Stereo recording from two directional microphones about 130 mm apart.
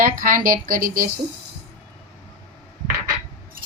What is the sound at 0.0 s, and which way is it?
Speech, 90° right.